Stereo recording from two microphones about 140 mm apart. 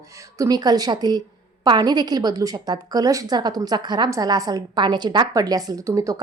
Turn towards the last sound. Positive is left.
turn(degrees=-25)  # may be behind; listen again after turning